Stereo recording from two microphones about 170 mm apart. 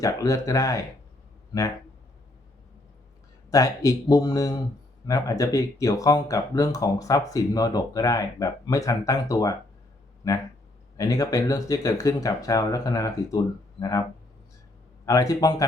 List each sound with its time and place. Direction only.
0.0 s speech: 20° left (ahead or behind)
3.5 s speech: 20° left (ahead or behind)
15.0 s speech: 20° left (ahead or behind)